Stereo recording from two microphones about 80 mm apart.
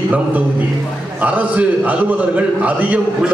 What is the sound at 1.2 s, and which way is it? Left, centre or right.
A man's voice, centre.